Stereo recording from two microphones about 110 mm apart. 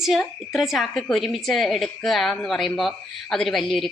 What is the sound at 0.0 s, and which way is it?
A woman's voice, centre (ahead or behind).